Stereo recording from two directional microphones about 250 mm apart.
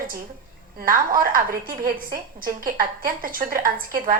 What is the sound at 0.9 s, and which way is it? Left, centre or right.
A woman's voice, right.